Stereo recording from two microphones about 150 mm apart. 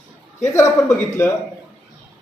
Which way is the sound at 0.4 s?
20° left (ahead or behind).